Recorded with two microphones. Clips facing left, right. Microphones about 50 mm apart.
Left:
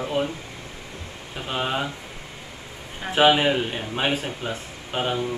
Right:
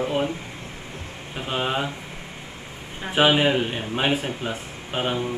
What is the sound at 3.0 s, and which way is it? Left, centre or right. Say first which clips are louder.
Speech: left 1 dB; centre.